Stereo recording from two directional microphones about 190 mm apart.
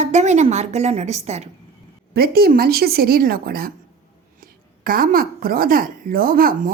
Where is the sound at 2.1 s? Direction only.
55° right (ahead or behind).